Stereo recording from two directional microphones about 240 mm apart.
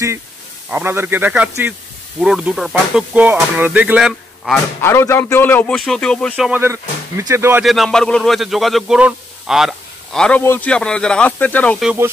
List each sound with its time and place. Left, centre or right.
0.7 s speech: centre
4.8 s speech: centre